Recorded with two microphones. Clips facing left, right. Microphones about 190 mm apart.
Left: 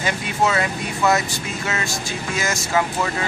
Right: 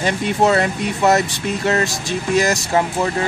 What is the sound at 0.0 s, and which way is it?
Speech, 40° right (ahead or behind).